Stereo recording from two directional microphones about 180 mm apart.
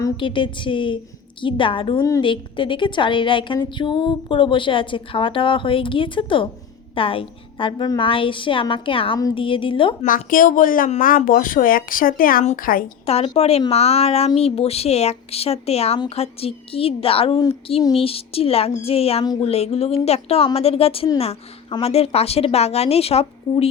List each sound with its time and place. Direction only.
0.0 s a woman's voice: 25° left (ahead or behind)
2.0 s a woman's voice: 15° left (ahead or behind)
2.2 s a woman's voice: 25° left (ahead or behind)
10.1 s speech: 50° left (ahead or behind)
13.1 s a woman's voice: 35° left (ahead or behind)